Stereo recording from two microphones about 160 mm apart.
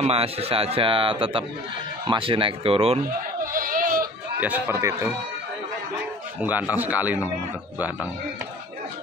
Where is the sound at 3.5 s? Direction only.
60° right (ahead or behind).